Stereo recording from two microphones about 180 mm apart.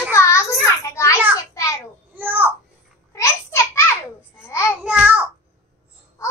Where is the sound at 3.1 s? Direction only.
15° left (ahead or behind).